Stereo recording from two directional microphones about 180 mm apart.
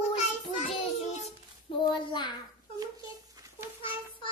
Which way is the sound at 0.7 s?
35° left (ahead or behind).